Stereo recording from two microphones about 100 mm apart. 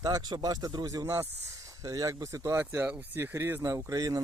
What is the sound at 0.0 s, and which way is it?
Speech, 40° right (ahead or behind).